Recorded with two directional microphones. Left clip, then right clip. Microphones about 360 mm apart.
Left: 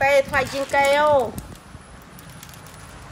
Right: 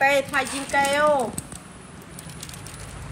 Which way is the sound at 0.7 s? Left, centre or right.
Centre.